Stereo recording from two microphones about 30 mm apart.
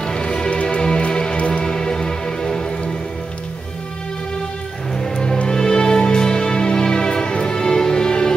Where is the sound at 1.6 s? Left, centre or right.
Left.